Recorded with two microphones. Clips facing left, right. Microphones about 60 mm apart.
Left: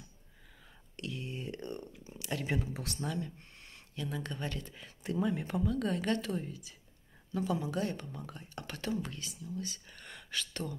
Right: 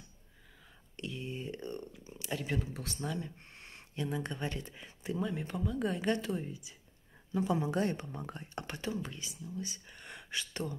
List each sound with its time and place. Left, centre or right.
0.9 s a sound: centre
2.4 s speech: centre
3.5 s speech: right; by 5.8 s centre
5.9 s a woman's voice: centre
7.5 s speech: right
8.7 s a woman's voice: centre